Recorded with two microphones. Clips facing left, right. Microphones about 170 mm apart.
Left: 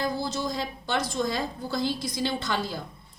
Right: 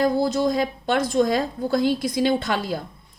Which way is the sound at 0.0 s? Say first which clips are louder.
Right 9 dB; 55° right (ahead or behind).